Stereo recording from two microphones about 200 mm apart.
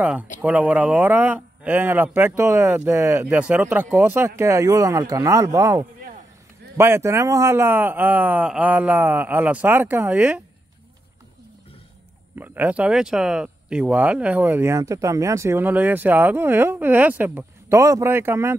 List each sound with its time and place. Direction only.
0.0 s speech: 5° right (ahead or behind)
12.4 s speech: 10° right (ahead or behind)